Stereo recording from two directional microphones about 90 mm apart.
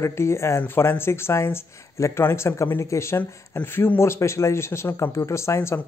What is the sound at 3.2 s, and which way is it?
Speech, 25° left (ahead or behind).